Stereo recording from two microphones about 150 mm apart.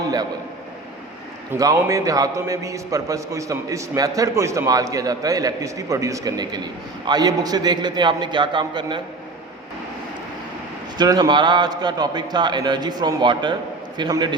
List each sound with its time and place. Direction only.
1.5 s a man's voice: 20° right (ahead or behind)
10.9 s a man's voice: 25° right (ahead or behind)